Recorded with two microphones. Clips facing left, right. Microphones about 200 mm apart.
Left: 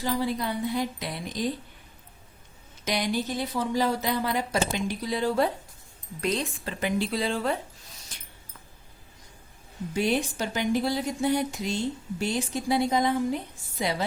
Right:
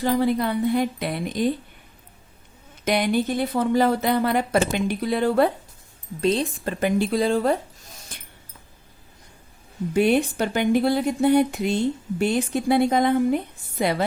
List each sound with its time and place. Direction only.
0.0 s speech: 55° right (ahead or behind)
2.8 s speech: 60° right (ahead or behind)
6.2 s speech: 30° right (ahead or behind)
6.7 s speech: 50° right (ahead or behind)
8.1 s a sound: 55° right (ahead or behind)
9.9 s speech: 60° right (ahead or behind)